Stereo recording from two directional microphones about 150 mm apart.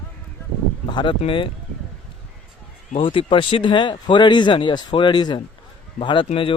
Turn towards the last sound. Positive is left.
turn(degrees=30)  # may be behind; listen again after turning